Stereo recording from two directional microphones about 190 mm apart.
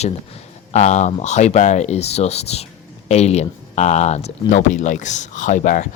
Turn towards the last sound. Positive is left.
turn(degrees=40)  # may be behind; listen again after turning